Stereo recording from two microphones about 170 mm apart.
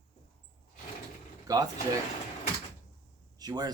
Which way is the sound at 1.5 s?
20° right (ahead or behind).